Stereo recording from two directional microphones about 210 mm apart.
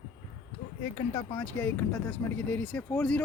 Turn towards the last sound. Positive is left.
turn(degrees=5)  # may be behind; listen again after turning